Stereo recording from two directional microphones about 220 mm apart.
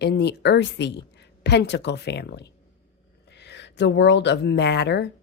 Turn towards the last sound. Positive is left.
turn(degrees=50)  # may be behind; listen again after turning